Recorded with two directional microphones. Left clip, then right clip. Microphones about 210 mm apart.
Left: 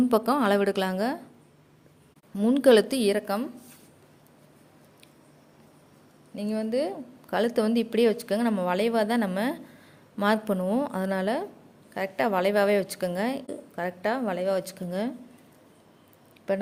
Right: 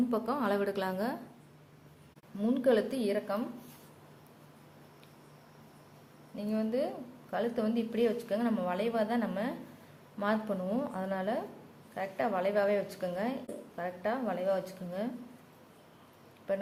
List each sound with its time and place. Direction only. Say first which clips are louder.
0.1 s a woman's voice: left 9 dB; 40° left (ahead or behind)
2.4 s a woman's voice: left 9 dB; 45° left (ahead or behind)
6.3 s a woman's voice: left 5 dB; 45° left (ahead or behind)
16.5 s a woman's voice: left 6 dB; 45° left (ahead or behind)